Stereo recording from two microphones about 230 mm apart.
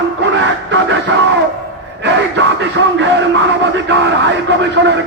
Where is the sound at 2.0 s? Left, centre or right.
Right.